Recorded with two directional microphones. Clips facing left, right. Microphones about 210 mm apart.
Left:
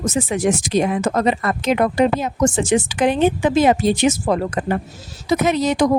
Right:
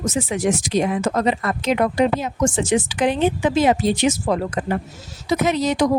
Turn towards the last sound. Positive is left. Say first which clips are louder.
# left 2 dB
turn(degrees=50)  # may be behind; listen again after turning